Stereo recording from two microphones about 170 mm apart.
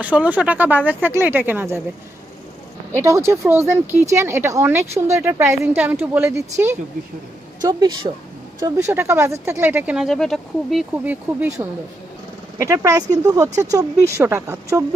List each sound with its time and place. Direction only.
0.0 s speech: 10° right (ahead or behind)
2.9 s speech: 15° right (ahead or behind)
12.5 s speech: 15° right (ahead or behind)